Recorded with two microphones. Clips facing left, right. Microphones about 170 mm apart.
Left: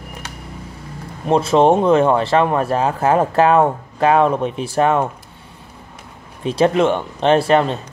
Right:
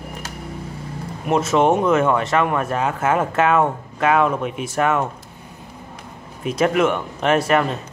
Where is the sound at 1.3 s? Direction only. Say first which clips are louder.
Left 3 dB; 30° left (ahead or behind).